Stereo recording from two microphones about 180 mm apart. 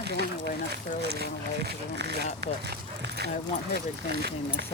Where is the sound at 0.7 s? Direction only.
60° right (ahead or behind).